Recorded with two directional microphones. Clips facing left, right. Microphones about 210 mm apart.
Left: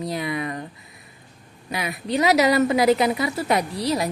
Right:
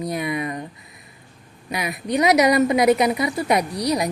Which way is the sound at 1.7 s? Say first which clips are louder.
Right 1 dB; 25° left (ahead or behind).